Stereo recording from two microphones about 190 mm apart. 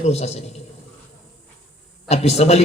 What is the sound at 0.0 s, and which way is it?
Speech, 35° left (ahead or behind).